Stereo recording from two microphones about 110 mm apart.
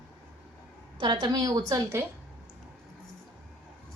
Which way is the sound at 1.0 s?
45° right (ahead or behind).